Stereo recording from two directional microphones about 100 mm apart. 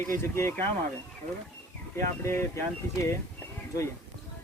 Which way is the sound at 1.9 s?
25° left (ahead or behind).